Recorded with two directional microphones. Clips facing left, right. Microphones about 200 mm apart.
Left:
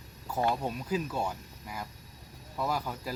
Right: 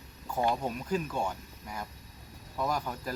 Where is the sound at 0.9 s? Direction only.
5° left (ahead or behind).